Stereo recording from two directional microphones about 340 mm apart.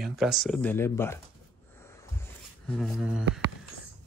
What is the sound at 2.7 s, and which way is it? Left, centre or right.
Speech, centre.